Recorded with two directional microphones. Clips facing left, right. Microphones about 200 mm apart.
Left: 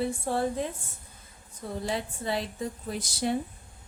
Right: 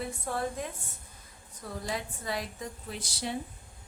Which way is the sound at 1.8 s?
30° left (ahead or behind).